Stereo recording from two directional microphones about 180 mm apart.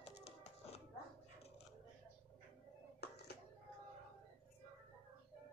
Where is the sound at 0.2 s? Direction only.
35° left (ahead or behind).